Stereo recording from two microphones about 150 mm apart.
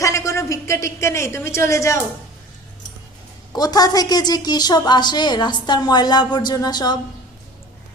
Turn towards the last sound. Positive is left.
turn(degrees=30)  # may be behind; listen again after turning